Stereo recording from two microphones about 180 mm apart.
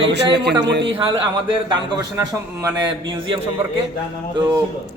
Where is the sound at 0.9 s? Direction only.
30° right (ahead or behind).